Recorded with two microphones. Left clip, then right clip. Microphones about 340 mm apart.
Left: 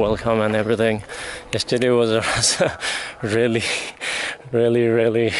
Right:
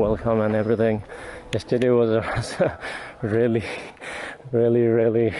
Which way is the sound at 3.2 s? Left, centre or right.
Centre.